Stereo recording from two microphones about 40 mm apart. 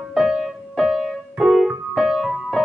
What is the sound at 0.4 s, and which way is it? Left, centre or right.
Keyboard, centre.